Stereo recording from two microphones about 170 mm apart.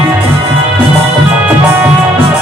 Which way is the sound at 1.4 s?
10° right (ahead or behind).